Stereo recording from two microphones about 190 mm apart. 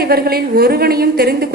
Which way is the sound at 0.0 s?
55° right (ahead or behind).